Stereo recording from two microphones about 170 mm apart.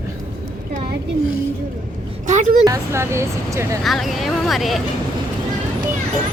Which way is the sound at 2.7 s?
15° right (ahead or behind).